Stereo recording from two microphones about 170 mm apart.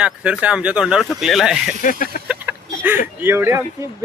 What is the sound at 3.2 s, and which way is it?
Speech, 15° right (ahead or behind).